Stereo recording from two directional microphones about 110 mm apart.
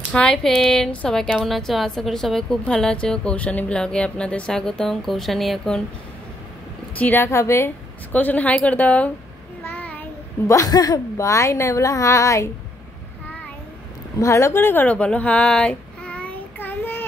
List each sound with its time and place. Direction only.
0.1 s a woman's voice: 10° left (ahead or behind)
7.0 s a woman's voice: 20° left (ahead or behind)
8.1 s a woman's voice: 15° left (ahead or behind)
9.7 s child singing: 15° left (ahead or behind)
10.4 s a woman's voice: 30° left (ahead or behind)
14.2 s a sound: 25° left (ahead or behind)